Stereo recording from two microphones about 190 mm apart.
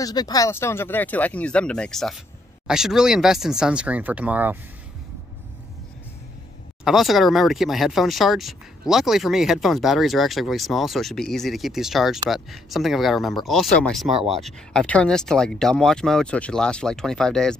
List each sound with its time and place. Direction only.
0.0 s speech: 20° left (ahead or behind); by 4.6 s 10° right (ahead or behind)
6.8 s speech: centre (ahead or behind)